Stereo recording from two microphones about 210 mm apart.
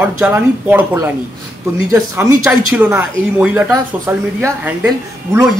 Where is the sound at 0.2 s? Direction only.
10° right (ahead or behind).